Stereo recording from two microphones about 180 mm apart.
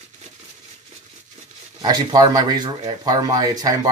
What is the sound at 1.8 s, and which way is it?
Speech, 20° right (ahead or behind).